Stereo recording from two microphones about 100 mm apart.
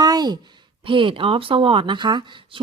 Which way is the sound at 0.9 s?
55° right (ahead or behind).